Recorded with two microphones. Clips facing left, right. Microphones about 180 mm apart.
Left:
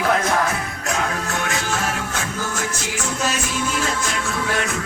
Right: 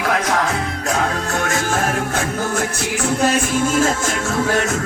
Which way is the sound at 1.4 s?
45° right (ahead or behind).